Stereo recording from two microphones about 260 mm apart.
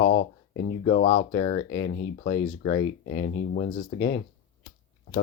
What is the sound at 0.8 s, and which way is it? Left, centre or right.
Speech, left.